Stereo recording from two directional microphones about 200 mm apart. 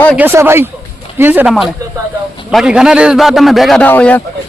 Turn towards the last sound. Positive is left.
turn(degrees=10)  # may be behind; listen again after turning